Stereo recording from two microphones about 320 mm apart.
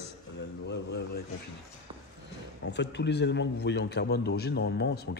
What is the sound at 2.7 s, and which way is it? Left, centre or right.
A man's voice, left.